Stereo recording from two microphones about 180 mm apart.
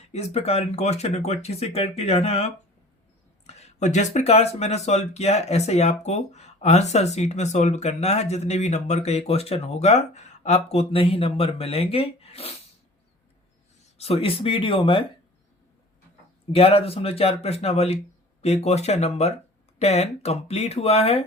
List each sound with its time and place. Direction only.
0.1 s speech: 35° left (ahead or behind)
14.0 s speech: 35° left (ahead or behind)
16.5 s speech: 35° left (ahead or behind)